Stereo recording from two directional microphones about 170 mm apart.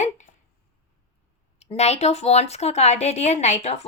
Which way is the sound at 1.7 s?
40° left (ahead or behind).